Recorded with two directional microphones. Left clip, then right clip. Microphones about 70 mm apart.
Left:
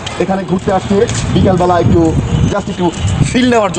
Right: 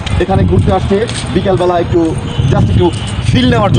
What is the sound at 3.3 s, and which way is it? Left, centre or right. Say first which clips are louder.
Speech: left 1 dB; left.